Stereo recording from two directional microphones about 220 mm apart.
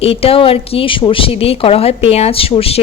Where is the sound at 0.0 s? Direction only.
25° left (ahead or behind).